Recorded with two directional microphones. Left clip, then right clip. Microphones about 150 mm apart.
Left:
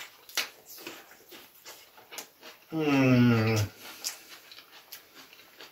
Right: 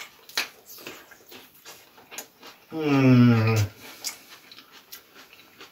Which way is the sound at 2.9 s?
25° left (ahead or behind).